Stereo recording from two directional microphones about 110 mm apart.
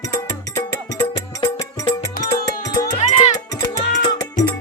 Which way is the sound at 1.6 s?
30° left (ahead or behind).